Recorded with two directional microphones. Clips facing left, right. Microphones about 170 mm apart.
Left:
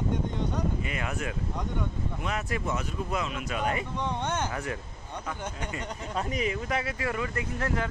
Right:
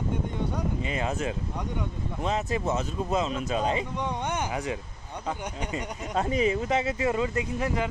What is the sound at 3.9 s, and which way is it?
Speech, 15° right (ahead or behind).